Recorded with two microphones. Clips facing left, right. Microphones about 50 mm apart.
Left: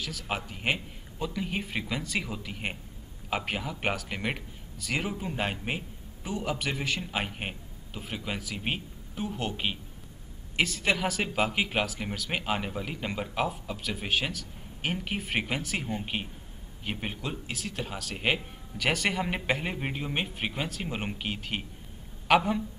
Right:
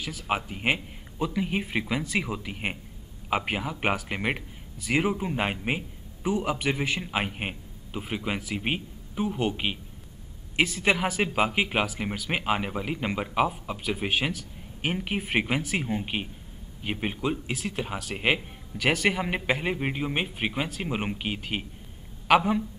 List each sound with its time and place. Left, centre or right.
0.0 s speech: centre